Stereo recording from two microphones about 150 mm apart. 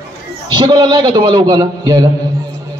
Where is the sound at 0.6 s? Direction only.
30° right (ahead or behind).